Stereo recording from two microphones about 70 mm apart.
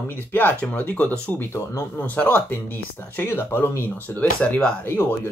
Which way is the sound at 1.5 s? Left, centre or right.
Left.